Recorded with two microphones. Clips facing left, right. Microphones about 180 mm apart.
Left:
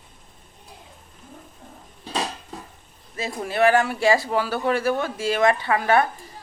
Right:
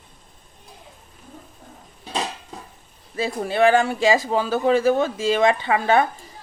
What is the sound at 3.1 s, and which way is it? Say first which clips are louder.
Speech: right 4 dB; 30° right (ahead or behind).